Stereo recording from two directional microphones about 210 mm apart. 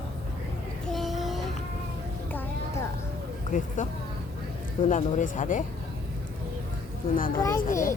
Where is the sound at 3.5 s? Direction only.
35° left (ahead or behind).